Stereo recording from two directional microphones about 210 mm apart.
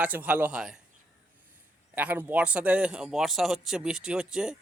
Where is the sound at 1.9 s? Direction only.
10° right (ahead or behind).